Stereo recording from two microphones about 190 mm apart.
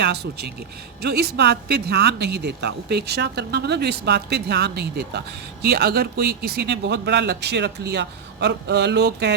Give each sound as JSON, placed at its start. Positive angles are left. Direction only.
{"t": 0.0, "sound": "speech", "side_deg": -60}